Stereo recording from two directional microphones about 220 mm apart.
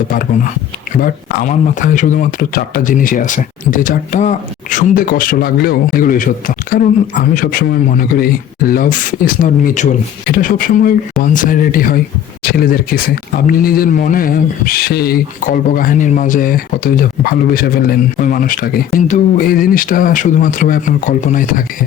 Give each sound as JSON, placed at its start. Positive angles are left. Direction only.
{"t": 0.1, "sound": "speech", "side_deg": 40}